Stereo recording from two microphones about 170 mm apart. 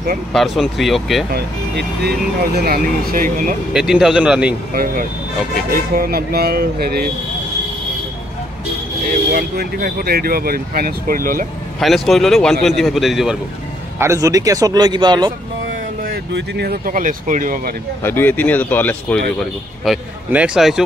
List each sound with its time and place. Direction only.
0.3 s a man's voice: centre (ahead or behind)
1.3 s speech: 70° right (ahead or behind); by 3.5 s 55° right (ahead or behind)
3.7 s a man's voice: 5° right (ahead or behind)
5.9 s speech: 60° right (ahead or behind)
9.3 s speech: 65° right (ahead or behind)
11.8 s a man's voice: centre (ahead or behind)
13.9 s speech: 15° right (ahead or behind)
16.1 s speech: 70° right (ahead or behind); by 17.7 s 55° right (ahead or behind)
18.0 s speech: 10° left (ahead or behind)
19.8 s a man's voice: 5° right (ahead or behind)